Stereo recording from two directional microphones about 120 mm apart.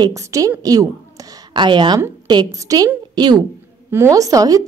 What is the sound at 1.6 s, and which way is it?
A woman's voice, 40° right (ahead or behind).